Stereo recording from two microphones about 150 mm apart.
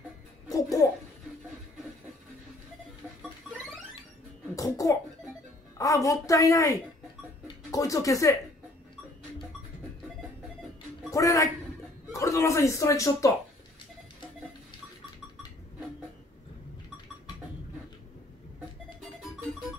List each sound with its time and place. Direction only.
0.5 s babbling: 20° left (ahead or behind)
4.6 s cough: 25° left (ahead or behind)
5.8 s a woman's voice: 20° left (ahead or behind)
7.4 s music: 20° left (ahead or behind)
11.1 s a man's voice: 20° left (ahead or behind)